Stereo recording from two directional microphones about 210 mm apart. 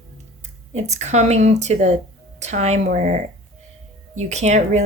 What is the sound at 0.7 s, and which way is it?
A woman's voice, 30° right (ahead or behind).